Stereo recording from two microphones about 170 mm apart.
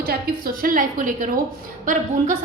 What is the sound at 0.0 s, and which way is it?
A woman's voice, 60° right (ahead or behind).